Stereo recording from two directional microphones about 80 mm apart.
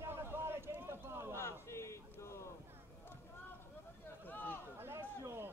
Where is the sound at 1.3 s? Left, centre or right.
Left.